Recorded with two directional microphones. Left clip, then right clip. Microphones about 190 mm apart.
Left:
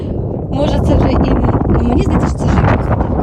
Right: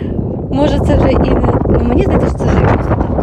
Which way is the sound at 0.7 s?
30° right (ahead or behind).